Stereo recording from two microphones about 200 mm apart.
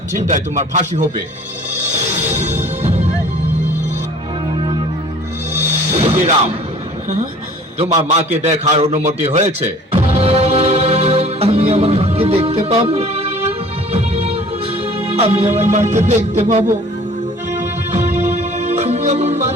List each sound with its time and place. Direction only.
0.3 s music: 35° right (ahead or behind)
2.3 s music: 35° right (ahead or behind)
6.0 s music: 30° right (ahead or behind)
7.8 s a man's voice: 30° right (ahead or behind)
13.9 s music: 30° right (ahead or behind)